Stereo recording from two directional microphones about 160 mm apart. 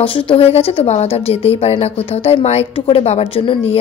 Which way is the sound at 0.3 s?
35° left (ahead or behind).